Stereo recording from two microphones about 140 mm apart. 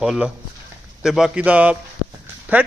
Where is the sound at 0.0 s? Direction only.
Centre (ahead or behind).